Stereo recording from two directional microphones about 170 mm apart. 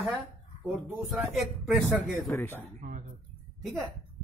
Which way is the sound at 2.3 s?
10° left (ahead or behind).